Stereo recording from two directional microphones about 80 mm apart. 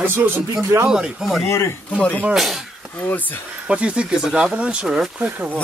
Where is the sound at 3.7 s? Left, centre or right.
Centre.